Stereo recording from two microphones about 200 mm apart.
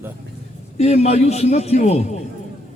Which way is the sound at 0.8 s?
35° left (ahead or behind).